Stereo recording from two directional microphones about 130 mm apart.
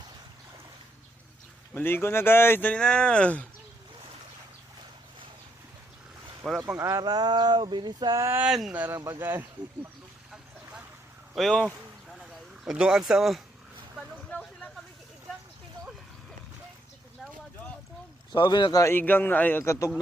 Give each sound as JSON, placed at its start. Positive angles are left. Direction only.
{"t": 1.7, "sound": "speech", "side_deg": 15}
{"t": 6.4, "sound": "speech", "side_deg": -5}
{"t": 6.7, "sound": "speech", "side_deg": -25}
{"t": 8.4, "sound": "speech", "side_deg": -5}
{"t": 9.0, "sound": "speech", "side_deg": -30}
{"t": 9.2, "sound": "speech", "side_deg": -15}
{"t": 11.3, "sound": "speech", "side_deg": 5}
{"t": 12.6, "sound": "speech", "side_deg": -5}
{"t": 14.3, "sound": "a sound", "side_deg": 10}
{"t": 18.3, "sound": "speech", "side_deg": 35}